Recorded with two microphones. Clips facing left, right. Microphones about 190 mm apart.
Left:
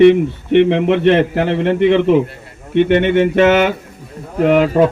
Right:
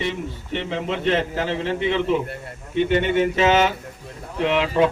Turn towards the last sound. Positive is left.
turn(degrees=50)  # may be behind; listen again after turning